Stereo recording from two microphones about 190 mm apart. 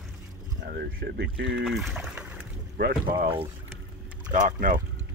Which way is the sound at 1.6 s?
Centre (ahead or behind).